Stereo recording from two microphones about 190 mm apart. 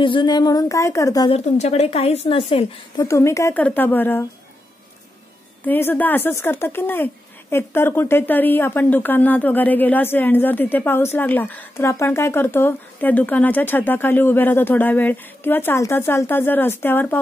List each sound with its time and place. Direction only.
0.0 s speech: 25° left (ahead or behind)
1.3 s a woman's voice: 35° left (ahead or behind)
3.1 s speech: 15° left (ahead or behind)
5.7 s speech: 10° left (ahead or behind)